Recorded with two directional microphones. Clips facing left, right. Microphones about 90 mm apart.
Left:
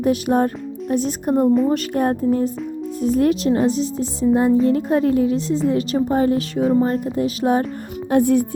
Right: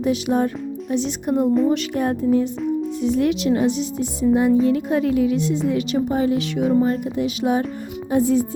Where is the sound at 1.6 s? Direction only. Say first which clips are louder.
Left 1 dB; 45° left (ahead or behind).